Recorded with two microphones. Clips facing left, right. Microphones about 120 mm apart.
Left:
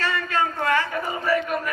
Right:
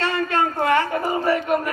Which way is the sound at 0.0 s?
25° right (ahead or behind).